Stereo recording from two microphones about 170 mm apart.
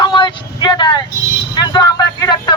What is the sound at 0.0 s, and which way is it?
Vehicle, 25° left (ahead or behind).